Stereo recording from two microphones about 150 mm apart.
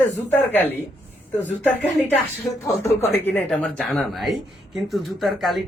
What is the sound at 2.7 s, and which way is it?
Speech, 20° left (ahead or behind).